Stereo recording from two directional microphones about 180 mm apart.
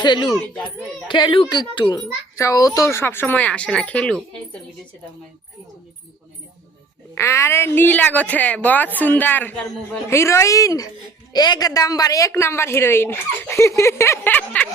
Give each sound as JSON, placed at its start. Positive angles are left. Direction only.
{"t": 0.0, "sound": "a child's voice", "side_deg": 25}
{"t": 0.3, "sound": "a child's voice", "side_deg": 5}
{"t": 1.0, "sound": "speech", "side_deg": 25}
{"t": 7.2, "sound": "speech", "side_deg": 15}